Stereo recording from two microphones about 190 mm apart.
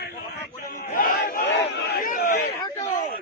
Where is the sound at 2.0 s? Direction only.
55° left (ahead or behind).